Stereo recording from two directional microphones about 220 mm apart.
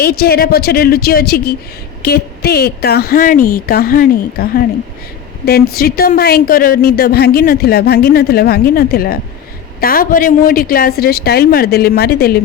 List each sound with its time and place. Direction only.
0.0 s a woman's voice: 45° left (ahead or behind)
5.7 s a woman's voice: 45° left (ahead or behind)